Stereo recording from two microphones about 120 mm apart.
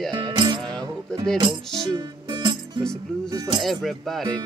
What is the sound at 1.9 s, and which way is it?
Music, 40° right (ahead or behind).